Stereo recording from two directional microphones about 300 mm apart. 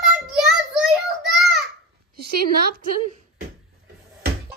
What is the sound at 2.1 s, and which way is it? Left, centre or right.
Speech, right.